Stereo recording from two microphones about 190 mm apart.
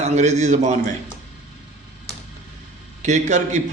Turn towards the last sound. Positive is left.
turn(degrees=-40)  # may be behind; listen again after turning